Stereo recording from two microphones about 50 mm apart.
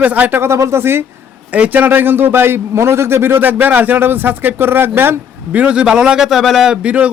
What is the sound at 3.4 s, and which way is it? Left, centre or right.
A man's voice, right.